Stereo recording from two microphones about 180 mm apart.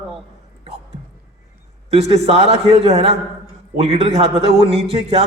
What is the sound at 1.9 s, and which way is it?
A man's voice, 35° right (ahead or behind).